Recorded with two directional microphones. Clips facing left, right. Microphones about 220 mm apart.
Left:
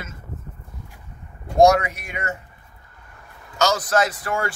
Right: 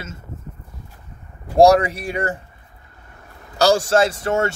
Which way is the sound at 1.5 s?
30° right (ahead or behind).